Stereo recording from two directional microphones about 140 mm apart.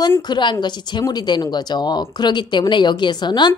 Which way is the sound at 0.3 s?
35° left (ahead or behind).